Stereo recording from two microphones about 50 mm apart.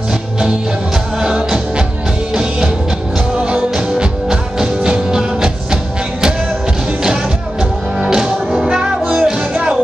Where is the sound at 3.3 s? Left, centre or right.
Right.